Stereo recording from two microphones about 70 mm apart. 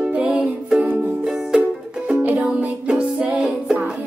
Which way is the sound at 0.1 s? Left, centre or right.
Centre.